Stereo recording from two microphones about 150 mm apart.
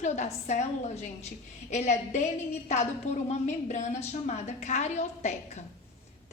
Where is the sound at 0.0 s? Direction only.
50° left (ahead or behind).